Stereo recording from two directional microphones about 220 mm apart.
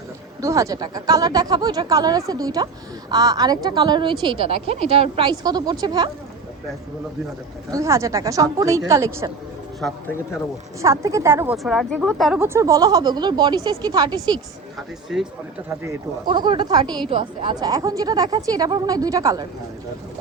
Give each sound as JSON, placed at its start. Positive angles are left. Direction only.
{"t": 0.4, "sound": "a woman's voice", "side_deg": -15}
{"t": 7.7, "sound": "a woman's voice", "side_deg": -15}
{"t": 10.8, "sound": "a woman's voice", "side_deg": -15}
{"t": 11.5, "sound": "a woman's voice", "side_deg": 0}
{"t": 15.7, "sound": "a woman's voice", "side_deg": -15}